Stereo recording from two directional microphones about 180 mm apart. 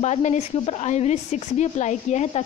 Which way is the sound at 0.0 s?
40° left (ahead or behind).